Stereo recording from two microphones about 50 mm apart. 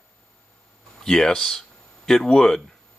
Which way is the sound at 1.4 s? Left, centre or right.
Centre.